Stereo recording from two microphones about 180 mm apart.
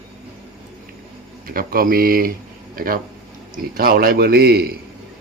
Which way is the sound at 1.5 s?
55° right (ahead or behind).